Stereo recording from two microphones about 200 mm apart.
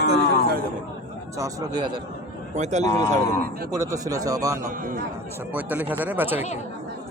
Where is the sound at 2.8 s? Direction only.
20° left (ahead or behind).